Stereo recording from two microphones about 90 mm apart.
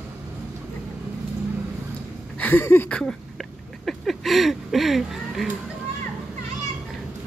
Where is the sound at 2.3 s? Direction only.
20° left (ahead or behind).